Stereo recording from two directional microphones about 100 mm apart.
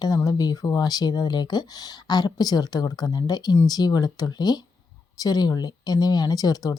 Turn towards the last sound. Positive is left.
turn(degrees=40)  # may be behind; listen again after turning